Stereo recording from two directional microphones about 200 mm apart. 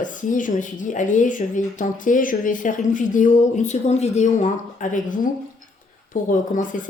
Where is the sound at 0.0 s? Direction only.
40° left (ahead or behind).